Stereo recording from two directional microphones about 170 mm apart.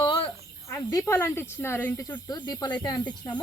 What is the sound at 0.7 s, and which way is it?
Speech, 15° left (ahead or behind).